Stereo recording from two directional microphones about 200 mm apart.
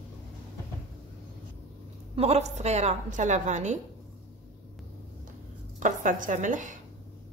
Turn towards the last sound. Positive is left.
turn(degrees=-40)  # may be behind; listen again after turning